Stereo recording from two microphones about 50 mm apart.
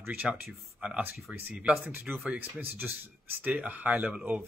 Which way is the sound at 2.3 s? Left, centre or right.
Right.